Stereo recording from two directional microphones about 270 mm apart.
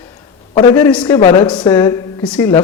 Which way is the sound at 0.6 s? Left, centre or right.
Centre.